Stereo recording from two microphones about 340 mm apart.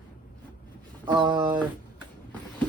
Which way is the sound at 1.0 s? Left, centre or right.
Centre.